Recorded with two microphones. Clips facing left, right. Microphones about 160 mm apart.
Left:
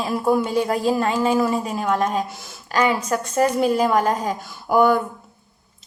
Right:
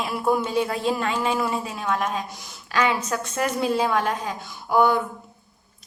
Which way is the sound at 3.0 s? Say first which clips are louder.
Left 6 dB; 35° left (ahead or behind).